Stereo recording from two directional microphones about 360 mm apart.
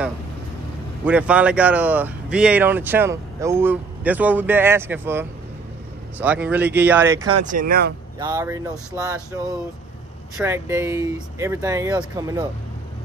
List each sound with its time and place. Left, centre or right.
1.0 s speech: centre
7.6 s speech: right
8.2 s speech: centre